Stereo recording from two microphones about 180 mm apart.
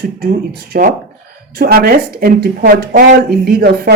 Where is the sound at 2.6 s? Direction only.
45° right (ahead or behind).